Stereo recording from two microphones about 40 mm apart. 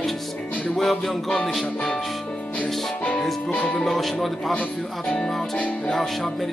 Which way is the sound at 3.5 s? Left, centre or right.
Left.